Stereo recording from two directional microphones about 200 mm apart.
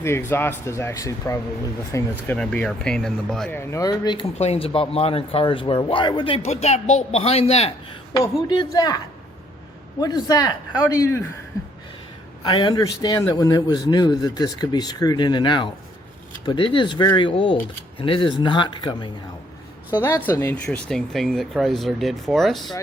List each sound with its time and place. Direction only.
0.0 s speech: 10° left (ahead or behind); by 7.7 s 30° left (ahead or behind)
8.2 s speech: 20° left (ahead or behind)
10.0 s speech: 20° left (ahead or behind)
12.4 s speech: 20° left (ahead or behind)
19.9 s speech: 10° left (ahead or behind)